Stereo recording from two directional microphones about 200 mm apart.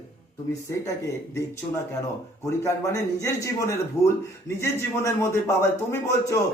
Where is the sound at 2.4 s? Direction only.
15° left (ahead or behind).